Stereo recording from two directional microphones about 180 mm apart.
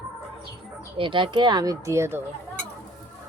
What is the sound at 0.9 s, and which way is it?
Speech, 30° right (ahead or behind).